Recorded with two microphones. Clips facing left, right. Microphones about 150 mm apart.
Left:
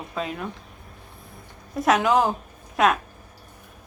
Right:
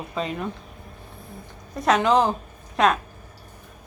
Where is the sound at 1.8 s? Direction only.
Centre (ahead or behind).